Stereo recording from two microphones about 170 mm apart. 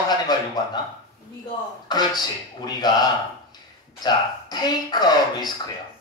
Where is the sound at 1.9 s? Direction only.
25° left (ahead or behind).